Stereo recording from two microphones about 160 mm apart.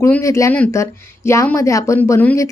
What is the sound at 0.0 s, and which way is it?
Speech, 20° left (ahead or behind).